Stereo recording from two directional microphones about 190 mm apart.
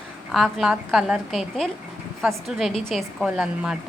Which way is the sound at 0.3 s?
Centre (ahead or behind).